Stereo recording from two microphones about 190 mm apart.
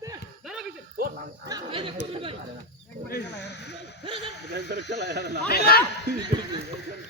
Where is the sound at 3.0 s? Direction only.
60° left (ahead or behind).